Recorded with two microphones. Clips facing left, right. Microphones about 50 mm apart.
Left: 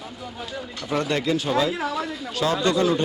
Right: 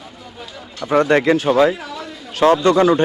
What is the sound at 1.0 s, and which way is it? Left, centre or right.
Speech, right.